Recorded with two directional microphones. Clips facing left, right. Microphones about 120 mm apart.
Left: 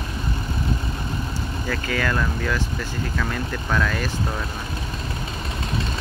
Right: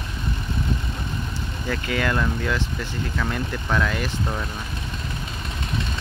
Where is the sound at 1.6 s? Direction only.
20° right (ahead or behind).